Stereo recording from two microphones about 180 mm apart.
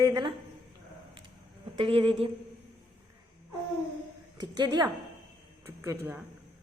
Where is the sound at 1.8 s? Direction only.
30° right (ahead or behind).